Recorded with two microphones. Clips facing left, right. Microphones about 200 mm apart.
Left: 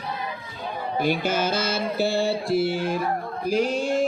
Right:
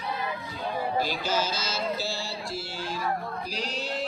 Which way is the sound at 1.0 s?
60° left (ahead or behind).